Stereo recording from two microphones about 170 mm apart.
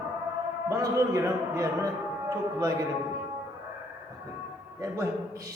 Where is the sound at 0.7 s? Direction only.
20° right (ahead or behind).